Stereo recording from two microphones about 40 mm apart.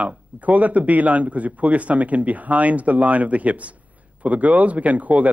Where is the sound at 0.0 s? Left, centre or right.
Right.